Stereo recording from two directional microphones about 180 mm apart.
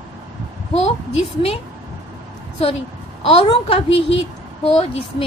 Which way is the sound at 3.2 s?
30° left (ahead or behind).